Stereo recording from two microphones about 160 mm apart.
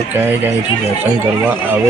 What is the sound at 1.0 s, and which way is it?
Speech, 10° right (ahead or behind).